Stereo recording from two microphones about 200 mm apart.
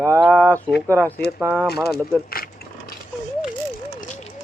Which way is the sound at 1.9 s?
50° left (ahead or behind).